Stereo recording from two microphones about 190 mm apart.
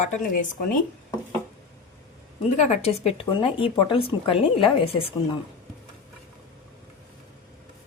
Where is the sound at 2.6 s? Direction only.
35° left (ahead or behind).